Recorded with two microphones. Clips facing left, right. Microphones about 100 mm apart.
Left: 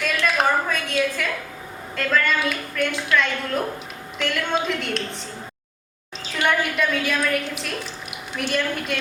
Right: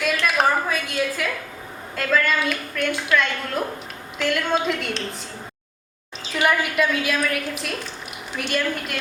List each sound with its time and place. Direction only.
0.0 s a sound: 5° right (ahead or behind)
2.0 s a woman's voice: centre (ahead or behind)
6.3 s a woman's voice: 5° right (ahead or behind)